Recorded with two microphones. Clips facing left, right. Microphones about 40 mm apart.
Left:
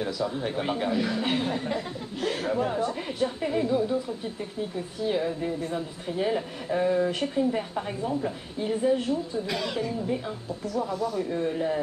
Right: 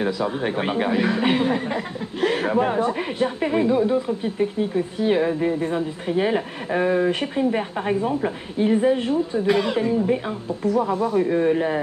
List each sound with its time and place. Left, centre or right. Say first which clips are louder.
0.0 s speech: right 6 dB; right